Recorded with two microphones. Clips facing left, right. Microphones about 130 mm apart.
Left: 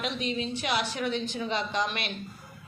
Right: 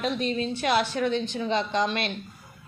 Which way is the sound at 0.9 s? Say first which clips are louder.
Right 4 dB; 30° right (ahead or behind).